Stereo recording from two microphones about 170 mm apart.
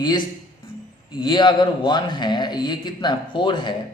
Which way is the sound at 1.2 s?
25° left (ahead or behind).